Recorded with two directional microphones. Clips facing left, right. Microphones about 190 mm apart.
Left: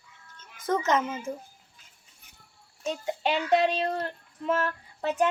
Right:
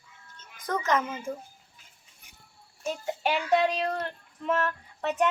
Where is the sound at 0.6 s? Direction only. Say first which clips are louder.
Left 2 dB; 25° left (ahead or behind).